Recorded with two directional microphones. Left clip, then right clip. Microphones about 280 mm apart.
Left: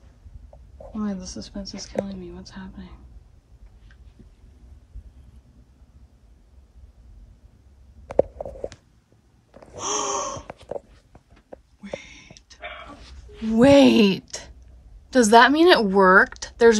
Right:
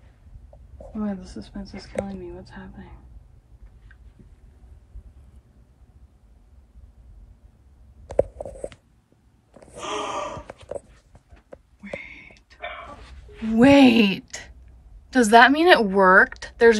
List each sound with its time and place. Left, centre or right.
1.0 s speech: centre
8.2 s writing: right
9.8 s snort: centre
10.4 s a sound: centre
12.0 s whispering: centre
13.0 s a sound: centre
15.0 s speech: centre